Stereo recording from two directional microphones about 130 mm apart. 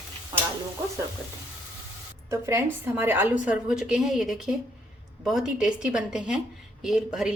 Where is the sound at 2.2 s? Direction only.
20° right (ahead or behind).